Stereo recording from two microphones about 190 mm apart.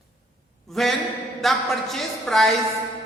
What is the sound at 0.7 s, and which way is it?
A woman's voice, centre (ahead or behind).